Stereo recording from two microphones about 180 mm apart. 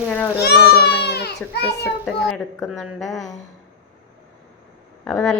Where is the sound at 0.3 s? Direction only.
65° left (ahead or behind).